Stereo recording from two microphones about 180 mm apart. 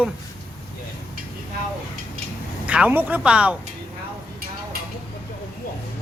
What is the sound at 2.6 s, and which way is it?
Speech, 5° right (ahead or behind).